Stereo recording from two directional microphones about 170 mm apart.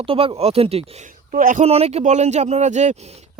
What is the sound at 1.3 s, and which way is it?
Speech, 50° right (ahead or behind).